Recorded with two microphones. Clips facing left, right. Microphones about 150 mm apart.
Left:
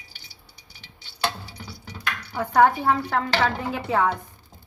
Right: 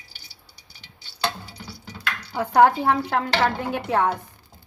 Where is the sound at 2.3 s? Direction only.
15° right (ahead or behind).